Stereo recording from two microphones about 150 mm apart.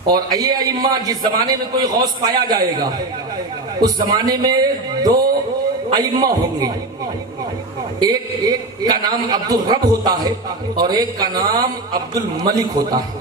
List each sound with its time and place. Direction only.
0.1 s a man's voice: 25° right (ahead or behind)
3.8 s a man's voice: 25° right (ahead or behind)
8.0 s a man's voice: 25° right (ahead or behind)